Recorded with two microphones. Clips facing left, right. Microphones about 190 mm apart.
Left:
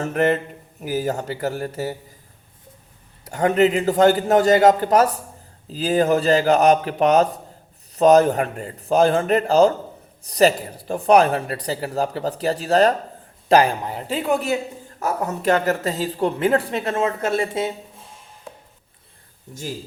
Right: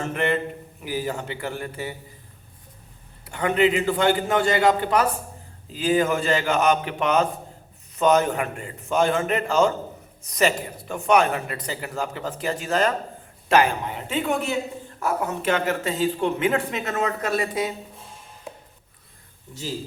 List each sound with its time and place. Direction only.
0.0 s a man's voice: 40° left (ahead or behind)
3.2 s a man's voice: 40° left (ahead or behind)